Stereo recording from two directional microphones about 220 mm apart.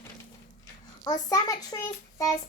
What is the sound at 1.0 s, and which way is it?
Speech, 15° left (ahead or behind).